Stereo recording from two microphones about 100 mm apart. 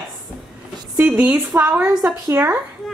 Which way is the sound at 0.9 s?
20° right (ahead or behind).